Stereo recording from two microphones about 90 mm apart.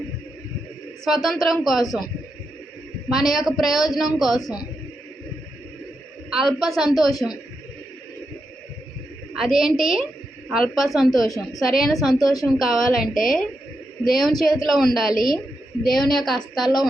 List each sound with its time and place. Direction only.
1.0 s a woman's voice: centre (ahead or behind)
3.1 s a woman's voice: 5° right (ahead or behind)
6.3 s a woman's voice: 5° right (ahead or behind)
7.2 s a woman's voice: 10° left (ahead or behind)
9.3 s a woman's voice: 5° right (ahead or behind)